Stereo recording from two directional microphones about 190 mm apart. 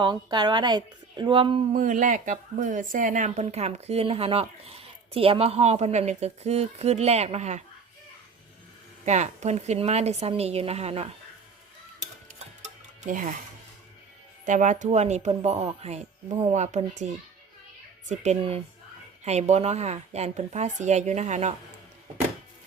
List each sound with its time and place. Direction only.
0.0 s a woman's voice: 20° right (ahead or behind)
1.7 s speech: 40° right (ahead or behind)
9.0 s speech: 35° right (ahead or behind)
12.6 s music: 45° right (ahead or behind)
14.4 s speech: 40° right (ahead or behind)
18.1 s speech: 35° right (ahead or behind)